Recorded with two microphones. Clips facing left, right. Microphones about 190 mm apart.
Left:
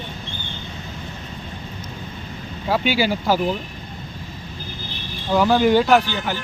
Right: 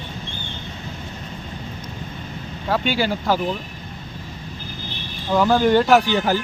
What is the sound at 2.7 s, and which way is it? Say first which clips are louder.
Speech: left 1 dB; 5° left (ahead or behind).